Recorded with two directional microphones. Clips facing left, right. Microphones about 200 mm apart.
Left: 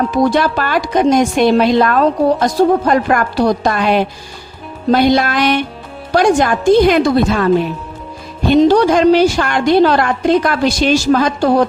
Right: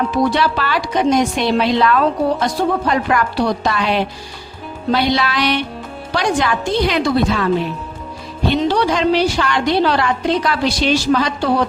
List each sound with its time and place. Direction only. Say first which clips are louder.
0.1 s a woman's voice: left 3 dB; 45° left (ahead or behind)